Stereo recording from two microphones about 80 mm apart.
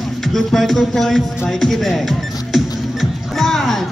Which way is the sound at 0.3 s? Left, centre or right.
Centre.